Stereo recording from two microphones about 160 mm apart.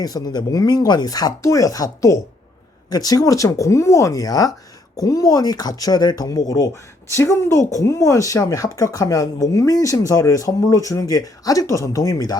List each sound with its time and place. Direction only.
0.0 s speech: 25° left (ahead or behind)